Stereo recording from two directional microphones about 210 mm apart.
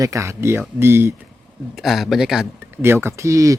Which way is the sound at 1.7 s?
Centre (ahead or behind).